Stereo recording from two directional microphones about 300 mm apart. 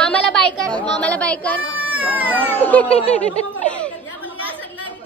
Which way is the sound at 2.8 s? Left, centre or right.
Left.